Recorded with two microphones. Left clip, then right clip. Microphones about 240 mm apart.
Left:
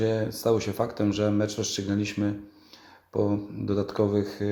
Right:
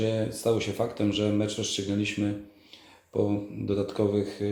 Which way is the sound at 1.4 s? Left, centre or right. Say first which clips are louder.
Left 1 dB; centre.